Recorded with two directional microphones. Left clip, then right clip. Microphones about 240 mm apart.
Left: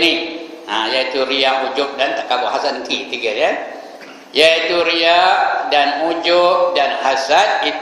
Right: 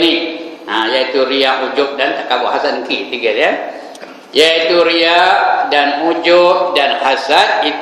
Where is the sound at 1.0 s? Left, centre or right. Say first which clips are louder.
Right 4 dB; centre.